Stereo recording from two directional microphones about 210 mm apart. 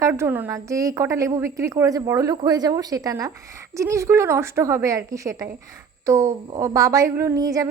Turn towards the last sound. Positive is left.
turn(degrees=-15)  # may be behind; listen again after turning